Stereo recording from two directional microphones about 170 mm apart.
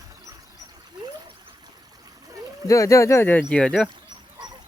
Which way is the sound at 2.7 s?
20° left (ahead or behind).